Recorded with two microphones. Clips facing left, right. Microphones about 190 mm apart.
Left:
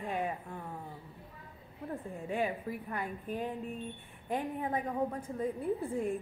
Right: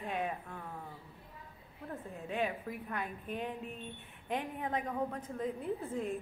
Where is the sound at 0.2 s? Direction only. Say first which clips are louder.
Left 2 dB; 15° left (ahead or behind).